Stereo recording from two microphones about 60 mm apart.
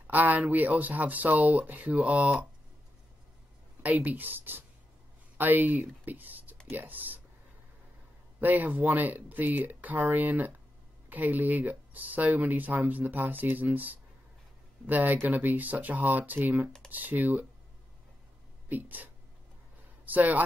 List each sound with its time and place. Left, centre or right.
0.0 s speech: right
3.8 s speech: right
8.4 s speech: right
18.7 s speech: right
20.1 s speech: right